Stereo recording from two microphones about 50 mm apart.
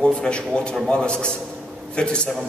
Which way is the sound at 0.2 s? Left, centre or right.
Centre.